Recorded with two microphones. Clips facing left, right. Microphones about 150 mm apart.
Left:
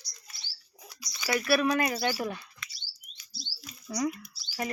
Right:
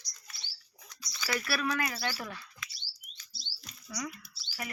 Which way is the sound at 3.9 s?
35° left (ahead or behind).